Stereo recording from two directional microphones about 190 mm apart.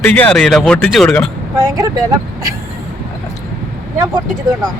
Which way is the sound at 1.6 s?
15° right (ahead or behind).